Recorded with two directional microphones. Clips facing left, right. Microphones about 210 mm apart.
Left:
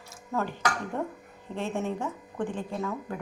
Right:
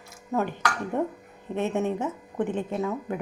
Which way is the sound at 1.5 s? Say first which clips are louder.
Right 5 dB; 20° right (ahead or behind).